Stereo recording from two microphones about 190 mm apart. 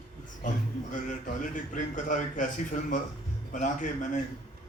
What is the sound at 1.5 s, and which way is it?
Speech, 45° left (ahead or behind).